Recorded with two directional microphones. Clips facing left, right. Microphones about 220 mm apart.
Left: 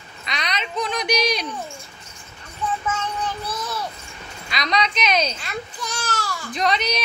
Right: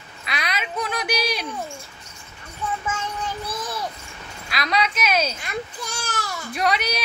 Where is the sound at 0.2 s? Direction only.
5° right (ahead or behind).